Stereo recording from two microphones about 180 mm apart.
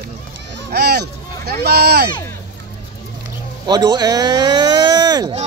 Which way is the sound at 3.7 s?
20° right (ahead or behind).